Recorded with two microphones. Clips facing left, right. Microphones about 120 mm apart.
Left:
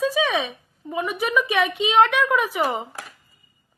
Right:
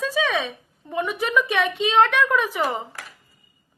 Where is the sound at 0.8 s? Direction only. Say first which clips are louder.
Even; centre (ahead or behind).